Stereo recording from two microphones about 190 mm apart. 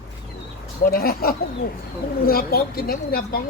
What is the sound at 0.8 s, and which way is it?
Speech, 50° left (ahead or behind).